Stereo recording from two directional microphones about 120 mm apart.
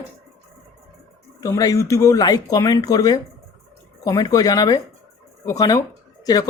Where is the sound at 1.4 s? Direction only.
30° left (ahead or behind).